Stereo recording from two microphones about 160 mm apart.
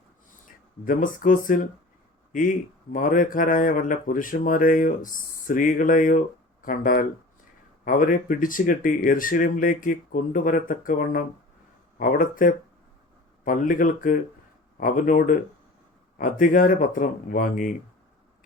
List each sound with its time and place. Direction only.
0.9 s speech: 55° left (ahead or behind)
2.9 s speech: 55° left (ahead or behind)